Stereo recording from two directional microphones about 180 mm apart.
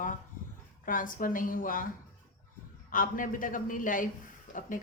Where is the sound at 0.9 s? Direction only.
50° left (ahead or behind).